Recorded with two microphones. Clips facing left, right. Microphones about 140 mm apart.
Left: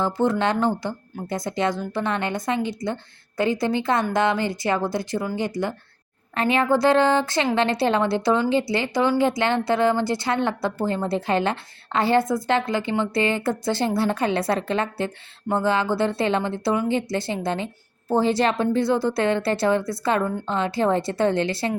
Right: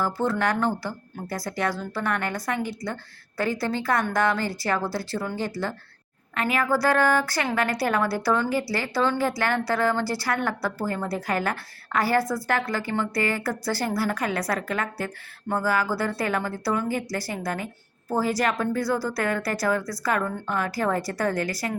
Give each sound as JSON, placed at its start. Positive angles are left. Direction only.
{"t": 0.0, "sound": "a woman's voice", "side_deg": 20}
{"t": 6.3, "sound": "a woman's voice", "side_deg": 30}